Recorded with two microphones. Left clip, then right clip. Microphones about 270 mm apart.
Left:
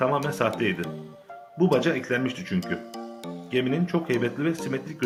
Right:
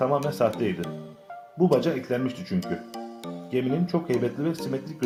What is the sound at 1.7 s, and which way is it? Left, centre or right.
Speech, centre.